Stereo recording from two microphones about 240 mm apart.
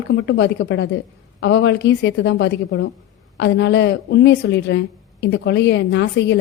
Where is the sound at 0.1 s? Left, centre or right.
Left.